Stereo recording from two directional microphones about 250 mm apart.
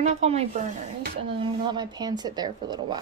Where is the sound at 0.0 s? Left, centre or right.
Right.